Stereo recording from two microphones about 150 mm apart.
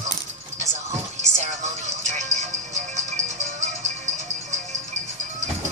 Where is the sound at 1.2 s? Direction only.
50° right (ahead or behind).